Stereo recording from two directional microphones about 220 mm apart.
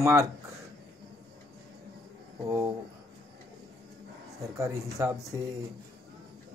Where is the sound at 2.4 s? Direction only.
15° right (ahead or behind).